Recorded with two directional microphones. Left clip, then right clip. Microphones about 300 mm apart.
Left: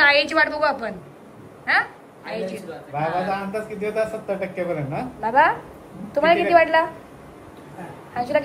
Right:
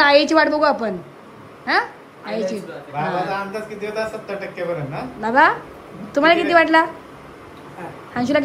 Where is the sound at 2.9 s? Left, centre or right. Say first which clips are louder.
Right 1 dB; left.